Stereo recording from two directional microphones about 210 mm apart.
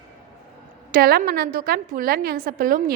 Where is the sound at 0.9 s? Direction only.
45° right (ahead or behind).